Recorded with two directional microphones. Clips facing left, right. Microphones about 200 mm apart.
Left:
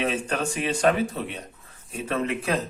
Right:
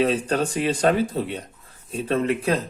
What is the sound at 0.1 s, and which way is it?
Speech, 35° right (ahead or behind).